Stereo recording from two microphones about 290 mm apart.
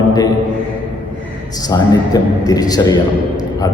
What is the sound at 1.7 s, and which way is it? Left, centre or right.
A man's voice, centre.